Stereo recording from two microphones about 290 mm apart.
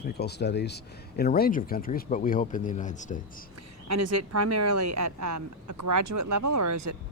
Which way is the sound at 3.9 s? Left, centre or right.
Right.